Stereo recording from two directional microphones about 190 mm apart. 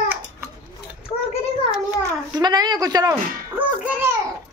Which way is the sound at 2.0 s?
20° right (ahead or behind).